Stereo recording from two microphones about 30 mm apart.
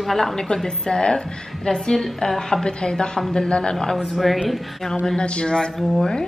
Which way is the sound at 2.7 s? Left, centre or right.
Left.